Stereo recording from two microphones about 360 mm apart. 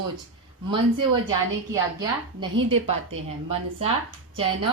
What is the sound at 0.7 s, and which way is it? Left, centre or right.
A woman's voice, centre.